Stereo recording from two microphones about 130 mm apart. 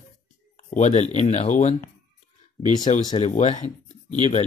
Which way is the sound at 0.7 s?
65° left (ahead or behind).